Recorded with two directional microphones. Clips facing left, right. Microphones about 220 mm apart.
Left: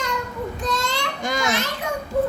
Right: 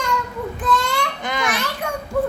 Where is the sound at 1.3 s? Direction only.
45° left (ahead or behind).